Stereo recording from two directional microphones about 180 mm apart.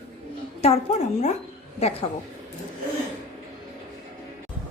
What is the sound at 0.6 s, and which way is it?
A woman's voice, 35° left (ahead or behind).